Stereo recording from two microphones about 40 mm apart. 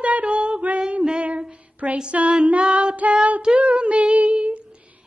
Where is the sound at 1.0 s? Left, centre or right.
Right.